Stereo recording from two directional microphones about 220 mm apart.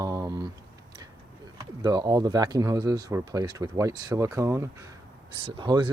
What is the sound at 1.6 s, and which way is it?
Speech, 20° right (ahead or behind).